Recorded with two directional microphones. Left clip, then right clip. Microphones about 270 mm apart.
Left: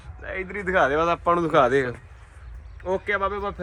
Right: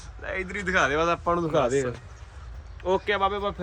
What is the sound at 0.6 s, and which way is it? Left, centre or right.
Speech, centre.